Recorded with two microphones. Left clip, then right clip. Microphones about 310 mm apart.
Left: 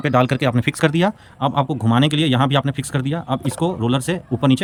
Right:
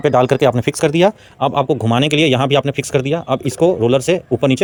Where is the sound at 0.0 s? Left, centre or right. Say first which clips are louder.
Right 6 dB; centre.